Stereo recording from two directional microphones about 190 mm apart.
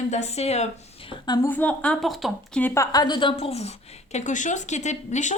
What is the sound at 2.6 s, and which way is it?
A woman's voice, 20° left (ahead or behind).